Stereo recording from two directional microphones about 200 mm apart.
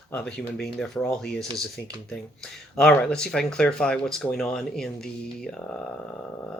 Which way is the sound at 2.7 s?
5° left (ahead or behind).